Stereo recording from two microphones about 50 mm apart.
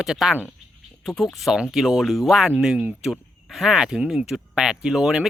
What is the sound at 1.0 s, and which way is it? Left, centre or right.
Speech, centre.